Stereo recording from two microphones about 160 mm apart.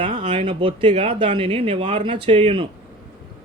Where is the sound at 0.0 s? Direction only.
30° right (ahead or behind).